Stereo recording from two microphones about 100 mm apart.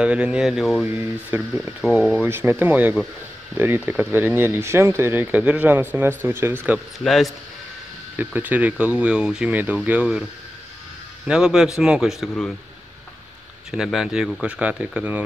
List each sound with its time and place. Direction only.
0.0 s speech: 10° right (ahead or behind)
0.8 s speech: 20° right (ahead or behind)
1.8 s speech: 5° right (ahead or behind)
2.2 s speech: 25° right (ahead or behind)
7.1 s speech: centre (ahead or behind)
8.2 s speech: 15° right (ahead or behind)
11.2 s speech: 5° right (ahead or behind)
13.7 s speech: 5° right (ahead or behind)